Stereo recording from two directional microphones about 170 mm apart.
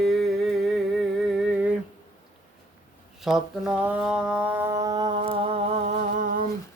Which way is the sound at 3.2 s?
5° right (ahead or behind).